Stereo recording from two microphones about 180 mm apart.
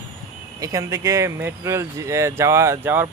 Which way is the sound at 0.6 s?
20° right (ahead or behind).